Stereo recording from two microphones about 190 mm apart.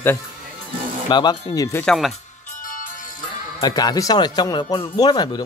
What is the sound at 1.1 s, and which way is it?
Speech, 20° left (ahead or behind).